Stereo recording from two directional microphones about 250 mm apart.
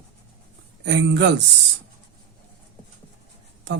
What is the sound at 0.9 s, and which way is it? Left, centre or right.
Speech, right.